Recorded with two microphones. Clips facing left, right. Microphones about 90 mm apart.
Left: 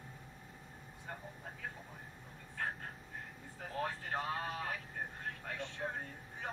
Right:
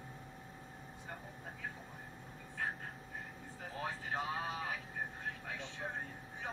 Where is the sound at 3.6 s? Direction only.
55° left (ahead or behind).